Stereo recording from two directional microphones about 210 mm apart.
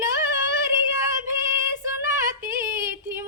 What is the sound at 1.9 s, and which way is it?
Female singing, 10° right (ahead or behind).